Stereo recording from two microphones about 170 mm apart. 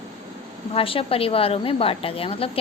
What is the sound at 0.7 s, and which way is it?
Speech, 35° left (ahead or behind).